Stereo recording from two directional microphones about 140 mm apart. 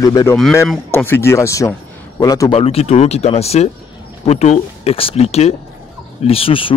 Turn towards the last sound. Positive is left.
turn(degrees=40)  # may be behind; listen again after turning